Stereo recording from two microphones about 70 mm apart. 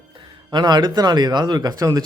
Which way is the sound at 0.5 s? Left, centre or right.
Right.